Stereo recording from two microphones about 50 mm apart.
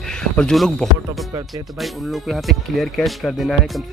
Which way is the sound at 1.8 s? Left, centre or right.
Centre.